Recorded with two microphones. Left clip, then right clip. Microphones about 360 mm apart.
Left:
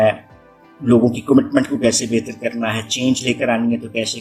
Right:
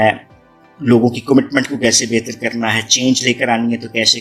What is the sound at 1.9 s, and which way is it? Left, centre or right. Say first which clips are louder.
Speech: right 4 dB; right.